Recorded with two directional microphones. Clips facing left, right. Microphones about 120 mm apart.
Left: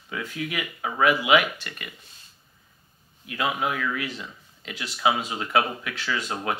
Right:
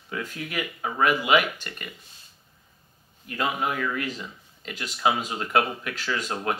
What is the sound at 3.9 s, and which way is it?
Speech, 40° right (ahead or behind).